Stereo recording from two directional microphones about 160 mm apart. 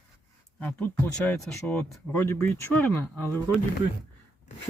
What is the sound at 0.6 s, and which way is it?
Speech, 10° left (ahead or behind).